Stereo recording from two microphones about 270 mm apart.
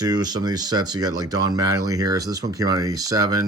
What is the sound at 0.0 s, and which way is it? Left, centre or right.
Speech, centre.